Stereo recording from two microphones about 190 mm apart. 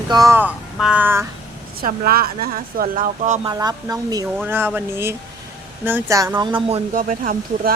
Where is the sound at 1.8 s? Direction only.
50° right (ahead or behind).